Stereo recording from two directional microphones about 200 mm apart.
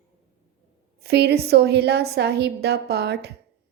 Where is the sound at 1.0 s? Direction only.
55° right (ahead or behind).